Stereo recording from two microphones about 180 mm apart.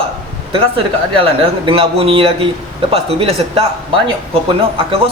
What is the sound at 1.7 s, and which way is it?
A man's voice, 30° right (ahead or behind).